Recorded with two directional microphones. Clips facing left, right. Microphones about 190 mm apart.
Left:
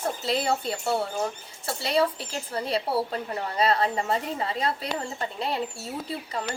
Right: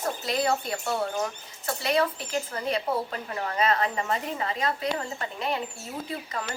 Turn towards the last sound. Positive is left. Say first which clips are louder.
# left 1 dB
turn(degrees=30)  # may be behind; listen again after turning